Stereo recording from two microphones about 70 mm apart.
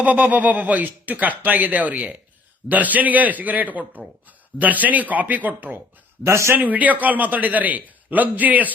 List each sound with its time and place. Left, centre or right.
0.0 s speech: right
6.2 s a man's voice: right
6.6 s speech: right